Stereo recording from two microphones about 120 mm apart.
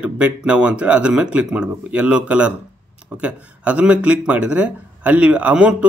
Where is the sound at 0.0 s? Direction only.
10° right (ahead or behind).